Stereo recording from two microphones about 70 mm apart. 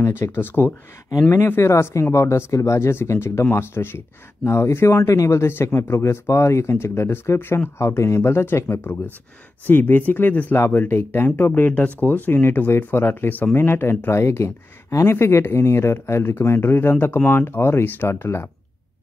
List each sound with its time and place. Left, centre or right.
0.0 s speech: left
1.6 s speech: left
9.7 s speech: left